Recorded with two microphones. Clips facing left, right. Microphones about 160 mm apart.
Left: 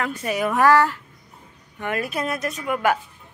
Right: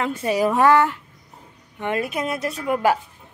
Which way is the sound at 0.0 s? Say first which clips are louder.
Right 3 dB; 25° right (ahead or behind).